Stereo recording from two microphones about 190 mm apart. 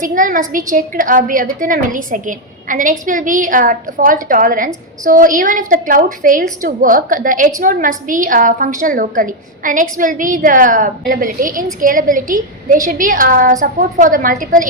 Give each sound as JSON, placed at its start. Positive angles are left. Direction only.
{"t": 0.0, "sound": "a woman's voice", "side_deg": -45}